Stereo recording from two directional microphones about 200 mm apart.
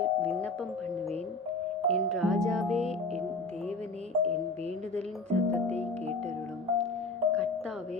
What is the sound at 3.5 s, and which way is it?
Music, 35° right (ahead or behind).